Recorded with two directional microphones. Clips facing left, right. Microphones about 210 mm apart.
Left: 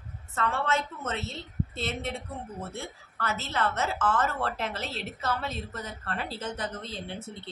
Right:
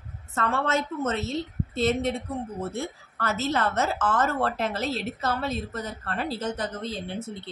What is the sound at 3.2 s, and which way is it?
A woman's voice, 40° right (ahead or behind).